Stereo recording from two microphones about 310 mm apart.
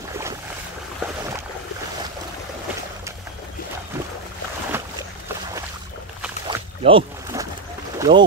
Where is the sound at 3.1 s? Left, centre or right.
Centre.